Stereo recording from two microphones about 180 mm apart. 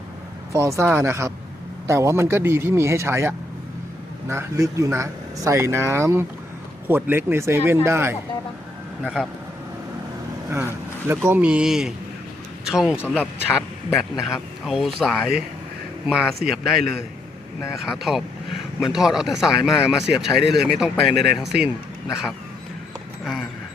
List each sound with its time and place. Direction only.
0.5 s speech: 15° right (ahead or behind)
11.1 s a man's voice: 10° right (ahead or behind)
23.2 s a sound: centre (ahead or behind)